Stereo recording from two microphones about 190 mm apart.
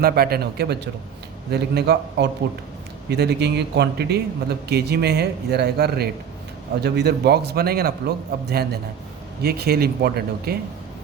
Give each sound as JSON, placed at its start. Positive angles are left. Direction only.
{"t": 0.0, "sound": "a man's voice", "side_deg": -55}